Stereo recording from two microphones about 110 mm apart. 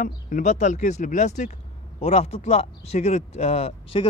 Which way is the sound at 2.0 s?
70° left (ahead or behind).